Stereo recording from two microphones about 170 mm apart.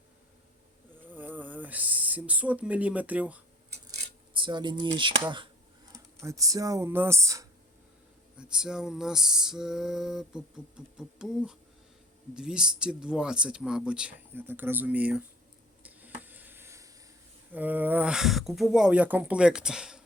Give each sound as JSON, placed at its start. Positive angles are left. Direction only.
{"t": 1.1, "sound": "speech", "side_deg": -10}
{"t": 4.4, "sound": "speech", "side_deg": -30}
{"t": 6.2, "sound": "speech", "side_deg": -20}
{"t": 8.4, "sound": "a sound", "side_deg": -5}